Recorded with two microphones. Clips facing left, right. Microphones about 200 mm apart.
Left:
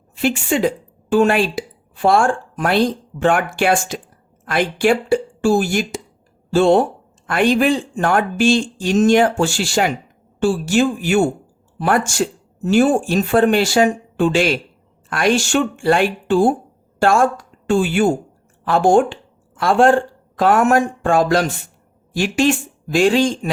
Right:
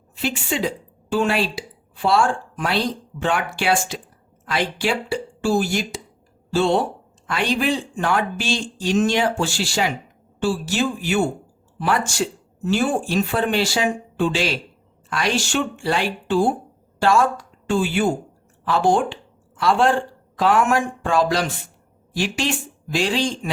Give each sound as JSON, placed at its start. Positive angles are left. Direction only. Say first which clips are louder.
{"t": 0.2, "sound": "a woman's voice", "louder": "left 6 dB", "side_deg": 50}